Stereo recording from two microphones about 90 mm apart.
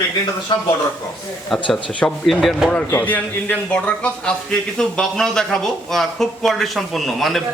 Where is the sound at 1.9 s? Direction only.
15° left (ahead or behind).